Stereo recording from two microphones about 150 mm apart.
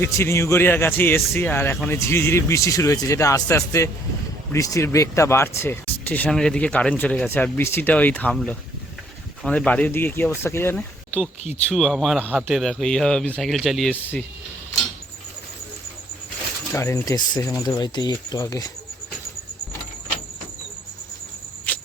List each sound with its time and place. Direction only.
0.0 s a man's voice: 20° left (ahead or behind); by 12.5 s 10° right (ahead or behind)
12.5 s speech: centre (ahead or behind)
16.7 s speech: 20° left (ahead or behind)
21.7 s cricket: 10° left (ahead or behind)